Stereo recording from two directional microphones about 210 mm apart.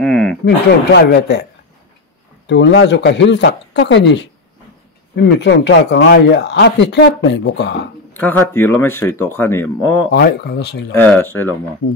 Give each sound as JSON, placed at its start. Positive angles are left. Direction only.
{"t": 0.0, "sound": "a sound", "side_deg": 5}
{"t": 0.9, "sound": "speech", "side_deg": 55}
{"t": 2.4, "sound": "speech", "side_deg": 60}
{"t": 8.1, "sound": "speech", "side_deg": 10}
{"t": 10.1, "sound": "speech", "side_deg": 50}
{"t": 11.0, "sound": "speech", "side_deg": 10}